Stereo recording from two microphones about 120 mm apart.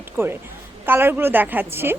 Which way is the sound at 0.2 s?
20° right (ahead or behind).